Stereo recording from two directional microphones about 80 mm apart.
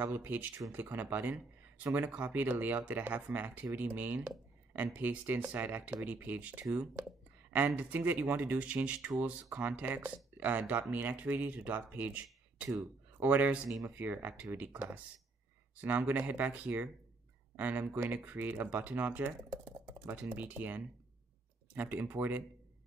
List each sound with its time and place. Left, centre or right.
0.0 s speech: right
12.6 s speech: right
13.2 s speech: centre